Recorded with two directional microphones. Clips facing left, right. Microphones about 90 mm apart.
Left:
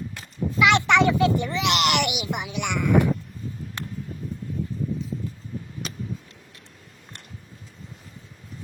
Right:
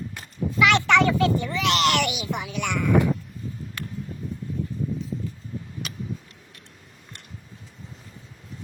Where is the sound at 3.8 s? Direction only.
25° left (ahead or behind).